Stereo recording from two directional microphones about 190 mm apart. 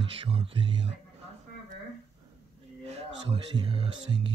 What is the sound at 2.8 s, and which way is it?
Speech, 30° right (ahead or behind).